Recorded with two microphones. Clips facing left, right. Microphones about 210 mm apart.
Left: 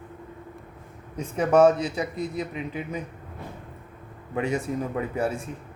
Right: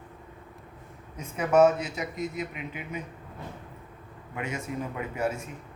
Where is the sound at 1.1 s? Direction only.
30° left (ahead or behind).